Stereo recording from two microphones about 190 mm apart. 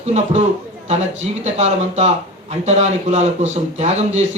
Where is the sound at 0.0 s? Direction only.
35° right (ahead or behind).